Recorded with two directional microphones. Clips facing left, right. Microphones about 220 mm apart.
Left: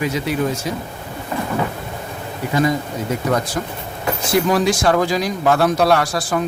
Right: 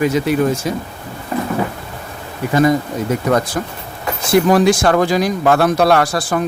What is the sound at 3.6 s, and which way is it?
A man's voice, 50° right (ahead or behind).